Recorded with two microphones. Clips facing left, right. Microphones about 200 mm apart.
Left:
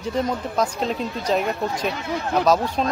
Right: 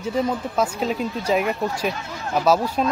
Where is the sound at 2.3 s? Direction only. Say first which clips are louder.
Right 1 dB; 5° right (ahead or behind).